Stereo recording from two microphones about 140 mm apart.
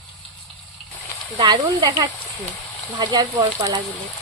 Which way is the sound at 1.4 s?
30° right (ahead or behind).